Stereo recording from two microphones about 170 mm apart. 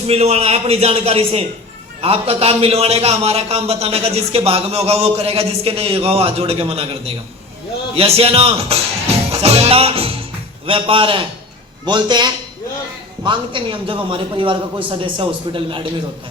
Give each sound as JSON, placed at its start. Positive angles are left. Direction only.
{"t": 0.1, "sound": "a man's voice", "side_deg": -35}